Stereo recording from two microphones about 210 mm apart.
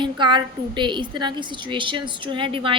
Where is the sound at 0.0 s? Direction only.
20° right (ahead or behind).